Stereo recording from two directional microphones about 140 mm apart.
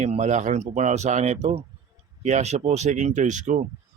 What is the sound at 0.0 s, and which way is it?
Speech, 55° right (ahead or behind).